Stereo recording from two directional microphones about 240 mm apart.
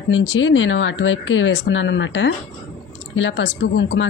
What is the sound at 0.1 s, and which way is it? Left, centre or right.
Speech, left.